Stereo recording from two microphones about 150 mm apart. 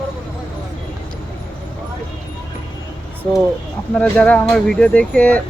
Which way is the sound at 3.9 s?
10° left (ahead or behind).